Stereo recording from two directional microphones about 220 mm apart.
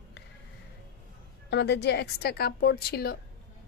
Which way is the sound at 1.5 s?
50° left (ahead or behind).